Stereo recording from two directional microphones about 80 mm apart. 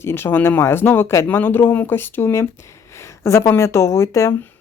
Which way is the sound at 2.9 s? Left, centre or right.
Left.